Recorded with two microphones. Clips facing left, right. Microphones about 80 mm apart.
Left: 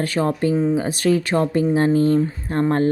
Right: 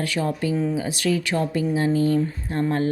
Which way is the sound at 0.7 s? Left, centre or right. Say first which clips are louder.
Left 5 dB; left.